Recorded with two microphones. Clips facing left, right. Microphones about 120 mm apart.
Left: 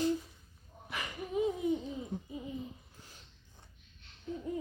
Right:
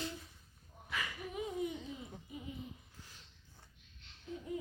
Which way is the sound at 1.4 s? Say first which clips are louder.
Left 11 dB; 25° left (ahead or behind).